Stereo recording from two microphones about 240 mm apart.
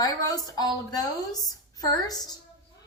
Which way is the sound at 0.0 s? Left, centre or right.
Centre.